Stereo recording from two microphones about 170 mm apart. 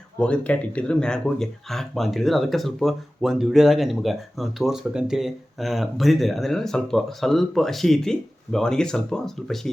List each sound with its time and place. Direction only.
0.2 s speech: 5° left (ahead or behind)